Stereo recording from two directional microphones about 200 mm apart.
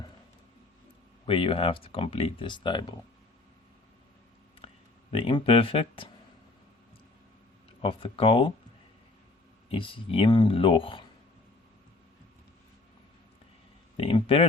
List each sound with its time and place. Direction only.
1.2 s speech: 25° left (ahead or behind)
4.6 s a sound: 30° left (ahead or behind)
5.1 s speech: 25° left (ahead or behind)
7.8 s speech: 25° left (ahead or behind)
9.6 s speech: 25° left (ahead or behind)
13.9 s speech: 30° left (ahead or behind)